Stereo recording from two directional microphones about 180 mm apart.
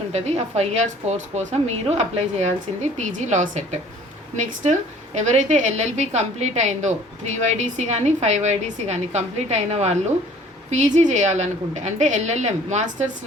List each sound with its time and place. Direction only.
0.1 s a woman's voice: 35° right (ahead or behind)